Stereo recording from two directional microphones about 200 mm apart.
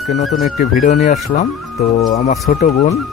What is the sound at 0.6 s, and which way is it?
Speech, 45° left (ahead or behind).